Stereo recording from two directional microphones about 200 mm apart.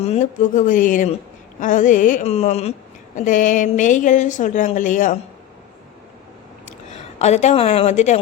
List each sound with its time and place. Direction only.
0.0 s a woman's voice: 35° left (ahead or behind)
7.2 s a woman's voice: 35° left (ahead or behind)